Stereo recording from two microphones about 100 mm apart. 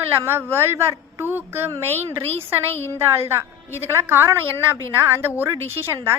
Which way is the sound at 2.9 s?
25° right (ahead or behind).